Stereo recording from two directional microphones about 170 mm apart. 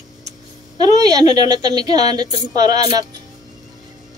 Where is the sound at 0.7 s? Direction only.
20° right (ahead or behind).